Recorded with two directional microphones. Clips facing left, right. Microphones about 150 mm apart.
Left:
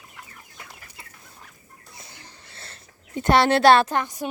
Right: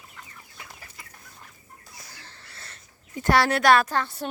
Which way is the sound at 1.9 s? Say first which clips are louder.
Left 3 dB; 20° left (ahead or behind).